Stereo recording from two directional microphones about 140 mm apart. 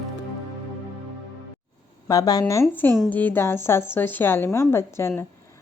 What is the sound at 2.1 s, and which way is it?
A woman's voice, 25° left (ahead or behind).